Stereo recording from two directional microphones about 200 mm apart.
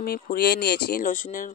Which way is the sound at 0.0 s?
50° left (ahead or behind).